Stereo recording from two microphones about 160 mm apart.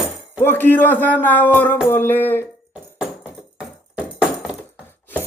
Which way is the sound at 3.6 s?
5° right (ahead or behind).